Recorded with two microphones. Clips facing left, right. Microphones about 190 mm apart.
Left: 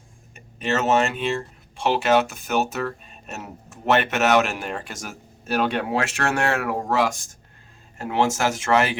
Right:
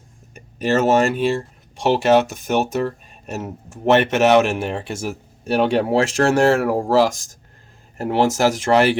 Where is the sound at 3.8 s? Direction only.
25° right (ahead or behind).